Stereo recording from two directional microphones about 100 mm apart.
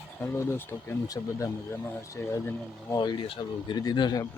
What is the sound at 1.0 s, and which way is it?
Speech, 35° left (ahead or behind).